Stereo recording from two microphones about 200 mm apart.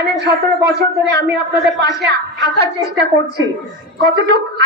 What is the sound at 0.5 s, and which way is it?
A woman's voice, 55° right (ahead or behind).